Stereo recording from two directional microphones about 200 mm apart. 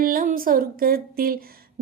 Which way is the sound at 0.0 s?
45° right (ahead or behind).